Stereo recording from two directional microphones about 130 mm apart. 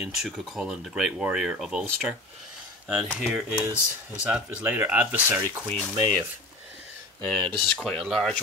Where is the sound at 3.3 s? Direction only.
15° right (ahead or behind).